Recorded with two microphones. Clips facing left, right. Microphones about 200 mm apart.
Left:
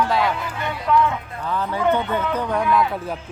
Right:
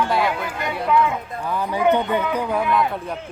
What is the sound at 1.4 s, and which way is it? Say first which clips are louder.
Speech: right 1 dB; 10° right (ahead or behind).